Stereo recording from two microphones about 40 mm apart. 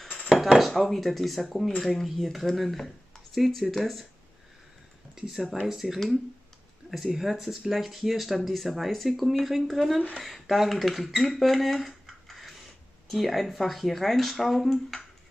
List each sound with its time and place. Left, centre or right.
0.6 s speech: centre
5.2 s speech: centre
7.1 s speech: centre